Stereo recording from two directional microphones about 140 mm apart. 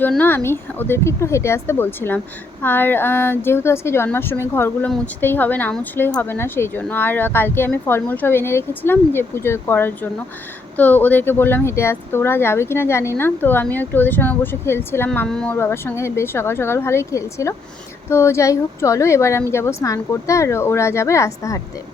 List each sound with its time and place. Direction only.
0.2 s a woman's voice: 15° left (ahead or behind)